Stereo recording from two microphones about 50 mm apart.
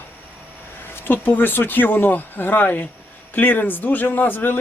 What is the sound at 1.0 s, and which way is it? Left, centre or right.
Speech, left.